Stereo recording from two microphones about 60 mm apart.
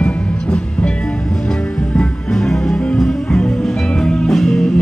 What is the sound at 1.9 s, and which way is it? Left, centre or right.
Music, centre.